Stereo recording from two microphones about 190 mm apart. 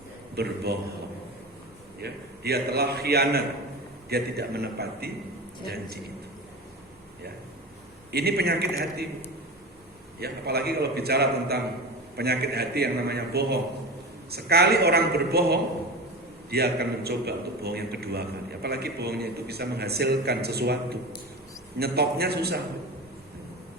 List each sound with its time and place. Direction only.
0.3 s a man's voice: 55° right (ahead or behind)
2.0 s a man's voice: 60° right (ahead or behind)
8.1 s a man's voice: 55° right (ahead or behind)
10.2 s a man's voice: 55° right (ahead or behind)